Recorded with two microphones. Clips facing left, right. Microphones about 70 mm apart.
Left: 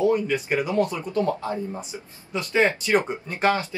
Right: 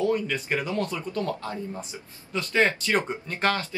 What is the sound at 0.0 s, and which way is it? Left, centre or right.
Speech, centre.